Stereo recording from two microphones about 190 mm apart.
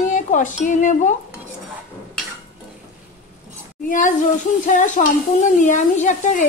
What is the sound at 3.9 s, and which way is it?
Speech, 45° left (ahead or behind).